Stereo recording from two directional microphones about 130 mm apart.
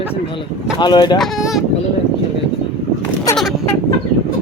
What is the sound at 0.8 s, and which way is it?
Speech, 35° left (ahead or behind).